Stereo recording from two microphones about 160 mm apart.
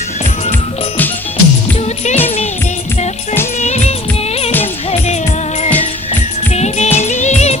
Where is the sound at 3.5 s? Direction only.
45° left (ahead or behind).